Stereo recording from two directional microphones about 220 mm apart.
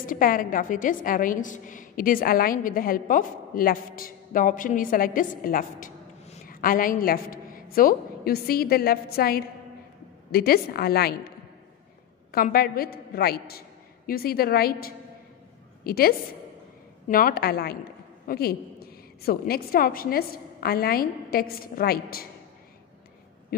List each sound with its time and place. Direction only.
0.0 s a woman's voice: 40° left (ahead or behind)
12.3 s a woman's voice: 45° left (ahead or behind)